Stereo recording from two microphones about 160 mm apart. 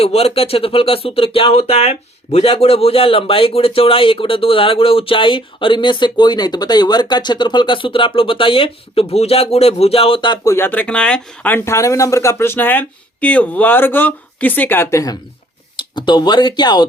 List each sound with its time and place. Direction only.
0.0 s speech: 40° left (ahead or behind)